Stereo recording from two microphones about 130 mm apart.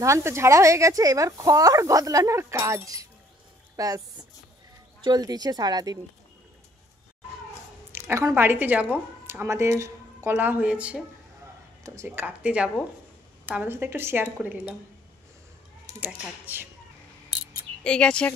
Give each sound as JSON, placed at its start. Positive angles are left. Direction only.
{"t": 0.0, "sound": "speech", "side_deg": -20}
{"t": 5.0, "sound": "speech", "side_deg": -30}
{"t": 7.9, "sound": "speech", "side_deg": -20}
{"t": 11.8, "sound": "speech", "side_deg": -20}
{"t": 12.3, "sound": "a woman's voice", "side_deg": -10}
{"t": 16.0, "sound": "a woman's voice", "side_deg": -15}
{"t": 17.8, "sound": "speech", "side_deg": 5}